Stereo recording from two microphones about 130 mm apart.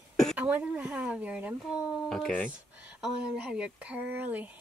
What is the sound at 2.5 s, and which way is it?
Speech, 10° right (ahead or behind).